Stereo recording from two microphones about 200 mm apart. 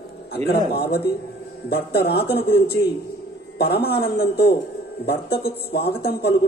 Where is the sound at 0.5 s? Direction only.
50° left (ahead or behind).